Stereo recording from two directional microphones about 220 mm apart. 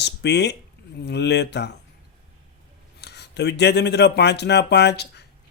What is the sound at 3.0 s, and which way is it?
Speech, 50° left (ahead or behind).